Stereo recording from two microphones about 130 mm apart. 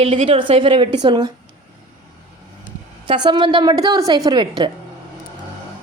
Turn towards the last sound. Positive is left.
turn(degrees=-35)  # may be behind; listen again after turning